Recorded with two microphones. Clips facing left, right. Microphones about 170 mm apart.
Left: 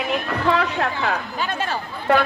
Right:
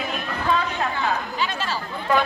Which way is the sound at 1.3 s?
50° left (ahead or behind).